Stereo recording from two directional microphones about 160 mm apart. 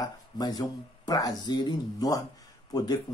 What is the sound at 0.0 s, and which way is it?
Speech, 25° left (ahead or behind).